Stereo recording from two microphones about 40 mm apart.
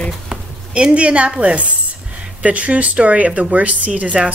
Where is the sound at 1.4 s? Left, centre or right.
Right.